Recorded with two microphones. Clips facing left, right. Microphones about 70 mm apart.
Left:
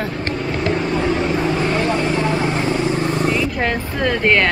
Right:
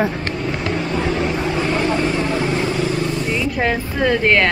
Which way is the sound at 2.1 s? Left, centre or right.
Left.